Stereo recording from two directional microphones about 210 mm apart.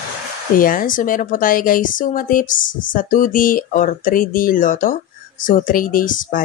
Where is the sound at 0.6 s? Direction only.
40° left (ahead or behind).